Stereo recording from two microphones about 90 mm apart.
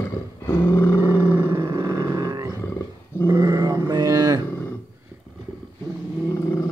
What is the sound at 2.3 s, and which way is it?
Roaring cats, 45° right (ahead or behind).